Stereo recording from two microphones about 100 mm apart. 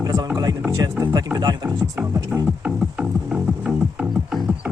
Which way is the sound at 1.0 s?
40° right (ahead or behind).